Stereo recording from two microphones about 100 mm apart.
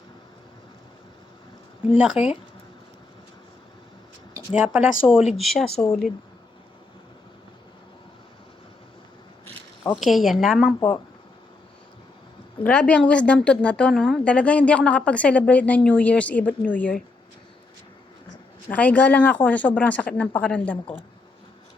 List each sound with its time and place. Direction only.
2.0 s speech: 10° right (ahead or behind)
4.5 s a woman's voice: 10° right (ahead or behind)
10.0 s a woman's voice: centre (ahead or behind)
10.8 s speech: 35° left (ahead or behind)
12.6 s a woman's voice: 10° left (ahead or behind)
18.7 s a woman's voice: 15° left (ahead or behind)